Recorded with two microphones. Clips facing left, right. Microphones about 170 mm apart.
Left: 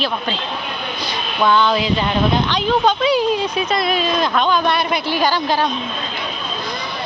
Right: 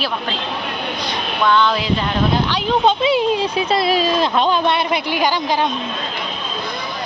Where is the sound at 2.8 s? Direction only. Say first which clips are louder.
Right 2 dB; 25° right (ahead or behind).